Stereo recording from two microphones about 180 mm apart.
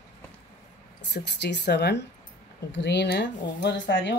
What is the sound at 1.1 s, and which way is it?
Speech, 70° left (ahead or behind).